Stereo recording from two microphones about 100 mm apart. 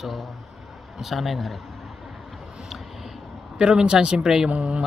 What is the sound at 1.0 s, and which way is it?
Speech, centre (ahead or behind).